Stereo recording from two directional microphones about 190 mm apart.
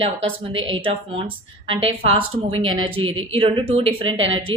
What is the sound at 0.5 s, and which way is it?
A woman's voice, 90° right.